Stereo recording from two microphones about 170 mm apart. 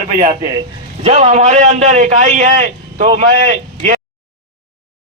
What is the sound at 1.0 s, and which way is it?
A man's voice, 40° right (ahead or behind).